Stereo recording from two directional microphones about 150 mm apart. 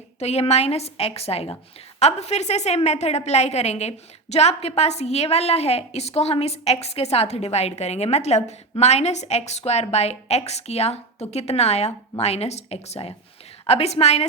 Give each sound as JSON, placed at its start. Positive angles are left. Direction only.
{"t": 0.2, "sound": "a woman's voice", "side_deg": 45}